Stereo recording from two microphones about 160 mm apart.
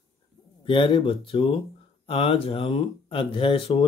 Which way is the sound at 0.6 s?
30° left (ahead or behind).